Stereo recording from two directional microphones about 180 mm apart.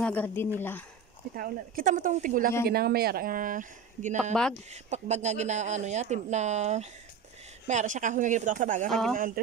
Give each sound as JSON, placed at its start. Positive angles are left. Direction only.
{"t": 0.0, "sound": "speech", "side_deg": 10}
{"t": 1.3, "sound": "a woman's voice", "side_deg": -50}
{"t": 8.8, "sound": "speech", "side_deg": 0}
{"t": 9.1, "sound": "speech", "side_deg": -50}